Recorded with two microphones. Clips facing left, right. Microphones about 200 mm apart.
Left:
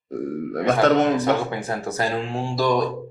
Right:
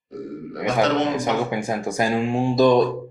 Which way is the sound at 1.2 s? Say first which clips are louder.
Left 1 dB; 15° right (ahead or behind).